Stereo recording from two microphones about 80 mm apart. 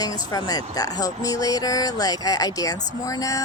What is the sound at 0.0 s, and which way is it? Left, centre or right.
Speech, left.